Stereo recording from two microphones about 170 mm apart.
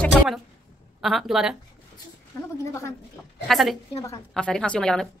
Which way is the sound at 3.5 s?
Centre (ahead or behind).